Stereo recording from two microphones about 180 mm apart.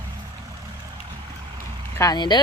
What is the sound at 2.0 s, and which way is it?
Speech, 20° left (ahead or behind).